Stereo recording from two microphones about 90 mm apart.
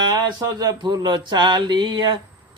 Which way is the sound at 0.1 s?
50° right (ahead or behind).